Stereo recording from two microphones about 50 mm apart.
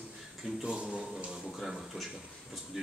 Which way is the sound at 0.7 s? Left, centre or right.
Centre.